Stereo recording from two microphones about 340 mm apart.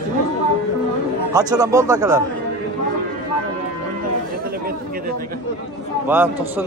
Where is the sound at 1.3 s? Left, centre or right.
Centre.